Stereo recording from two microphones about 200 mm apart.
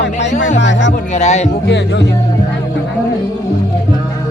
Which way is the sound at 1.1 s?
35° left (ahead or behind).